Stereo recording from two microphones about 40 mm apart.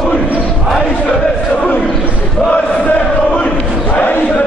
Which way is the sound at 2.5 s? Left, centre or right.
Left.